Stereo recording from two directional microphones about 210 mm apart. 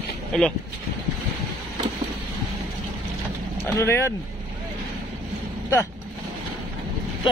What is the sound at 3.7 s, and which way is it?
Speech, 10° left (ahead or behind).